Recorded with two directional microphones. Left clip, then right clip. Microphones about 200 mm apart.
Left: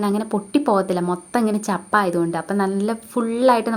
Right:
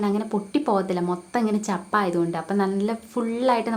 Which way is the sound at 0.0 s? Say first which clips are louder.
Left 3 dB; 25° left (ahead or behind).